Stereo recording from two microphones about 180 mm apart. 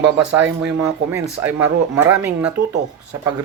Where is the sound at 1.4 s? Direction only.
10° right (ahead or behind).